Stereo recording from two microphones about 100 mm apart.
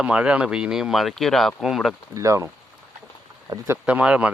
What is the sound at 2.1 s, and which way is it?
Speech, 30° right (ahead or behind).